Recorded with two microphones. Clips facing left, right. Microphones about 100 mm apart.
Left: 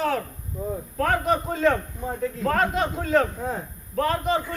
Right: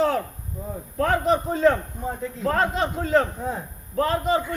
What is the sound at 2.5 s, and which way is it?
Speech, 25° right (ahead or behind).